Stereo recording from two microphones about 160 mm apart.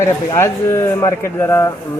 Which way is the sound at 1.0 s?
20° left (ahead or behind).